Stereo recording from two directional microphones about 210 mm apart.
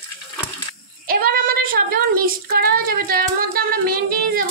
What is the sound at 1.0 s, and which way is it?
Child singing, 45° right (ahead or behind).